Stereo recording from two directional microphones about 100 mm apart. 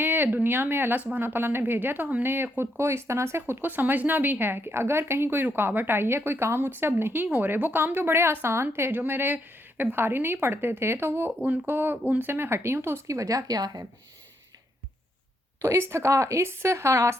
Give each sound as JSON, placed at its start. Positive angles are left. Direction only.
{"t": 0.0, "sound": "speech", "side_deg": -20}
{"t": 15.6, "sound": "speech", "side_deg": -25}